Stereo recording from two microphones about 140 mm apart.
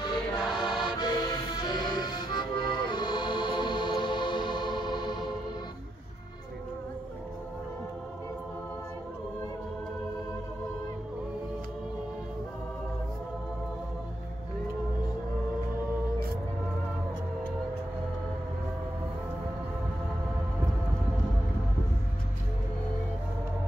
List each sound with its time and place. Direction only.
0.0 s music: 30° left (ahead or behind)